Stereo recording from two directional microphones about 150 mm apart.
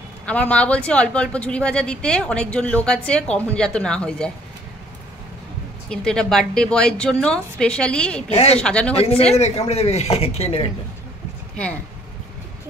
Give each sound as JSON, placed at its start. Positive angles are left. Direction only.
{"t": 0.2, "sound": "speech", "side_deg": 10}
{"t": 5.9, "sound": "a woman's voice", "side_deg": 5}
{"t": 8.3, "sound": "speech", "side_deg": 40}
{"t": 8.5, "sound": "speech", "side_deg": 5}
{"t": 8.9, "sound": "speech", "side_deg": 40}